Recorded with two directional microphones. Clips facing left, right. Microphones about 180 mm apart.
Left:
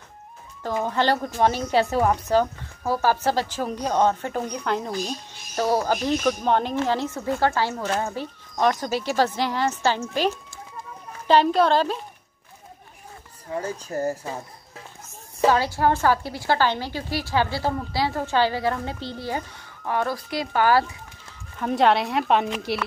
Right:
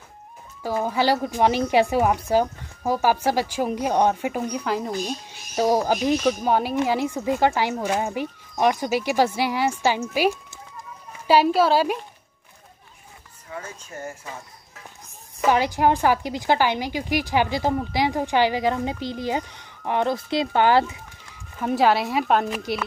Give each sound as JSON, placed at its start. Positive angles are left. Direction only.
{"t": 0.6, "sound": "a woman's voice", "side_deg": -10}
{"t": 13.5, "sound": "speech", "side_deg": 35}
{"t": 15.5, "sound": "a woman's voice", "side_deg": -15}
{"t": 21.5, "sound": "speech", "side_deg": -5}